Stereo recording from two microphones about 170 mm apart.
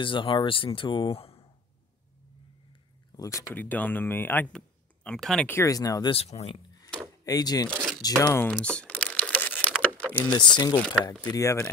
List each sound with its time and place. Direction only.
0.0 s speech: 30° left (ahead or behind)
3.1 s speech: 20° left (ahead or behind)
6.1 s speech: 35° left (ahead or behind)
7.2 s speech: 20° left (ahead or behind)
7.7 s a sound: 5° right (ahead or behind)
8.0 s speech: 15° left (ahead or behind)
8.5 s typing: 5° left (ahead or behind)
10.6 s speech: 25° left (ahead or behind)